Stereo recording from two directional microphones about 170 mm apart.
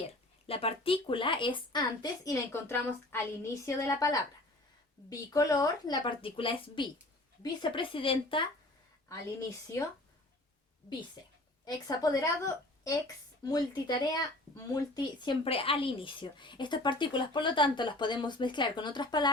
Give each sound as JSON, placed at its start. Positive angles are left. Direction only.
{"t": 0.4, "sound": "a woman's voice", "side_deg": 35}
{"t": 11.6, "sound": "a woman's voice", "side_deg": 25}